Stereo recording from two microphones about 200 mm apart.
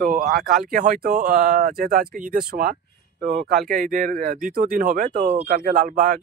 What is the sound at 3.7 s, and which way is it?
Speech, 45° right (ahead or behind).